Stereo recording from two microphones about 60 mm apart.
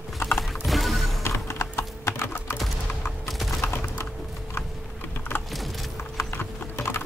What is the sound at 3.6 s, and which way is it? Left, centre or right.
Typing, left.